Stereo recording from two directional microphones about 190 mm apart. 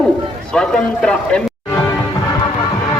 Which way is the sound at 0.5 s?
5° left (ahead or behind).